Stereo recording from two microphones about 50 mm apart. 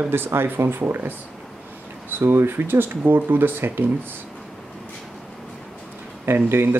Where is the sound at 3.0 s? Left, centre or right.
Right.